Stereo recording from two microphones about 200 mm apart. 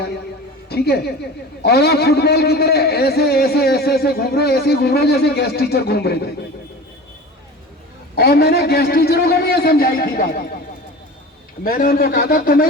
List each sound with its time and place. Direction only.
0.7 s a man's voice: 55° left (ahead or behind)
8.1 s a man's voice: 50° left (ahead or behind)
11.6 s a man's voice: 45° left (ahead or behind)